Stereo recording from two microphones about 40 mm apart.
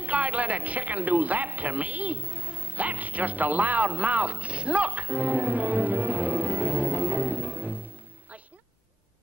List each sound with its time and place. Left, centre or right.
0.0 s speech: right